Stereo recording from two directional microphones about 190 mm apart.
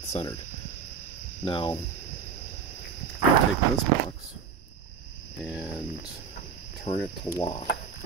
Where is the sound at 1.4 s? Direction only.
25° left (ahead or behind).